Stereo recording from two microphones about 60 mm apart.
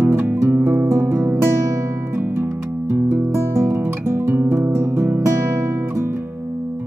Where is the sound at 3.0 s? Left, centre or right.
Right.